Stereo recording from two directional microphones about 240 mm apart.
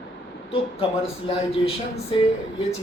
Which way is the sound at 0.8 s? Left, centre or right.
Left.